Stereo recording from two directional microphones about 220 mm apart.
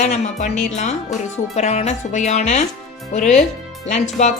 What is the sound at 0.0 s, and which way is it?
Speech, 30° left (ahead or behind).